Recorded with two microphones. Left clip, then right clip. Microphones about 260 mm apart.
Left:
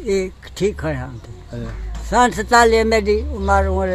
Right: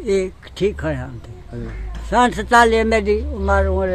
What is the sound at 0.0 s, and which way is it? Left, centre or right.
Speech, centre.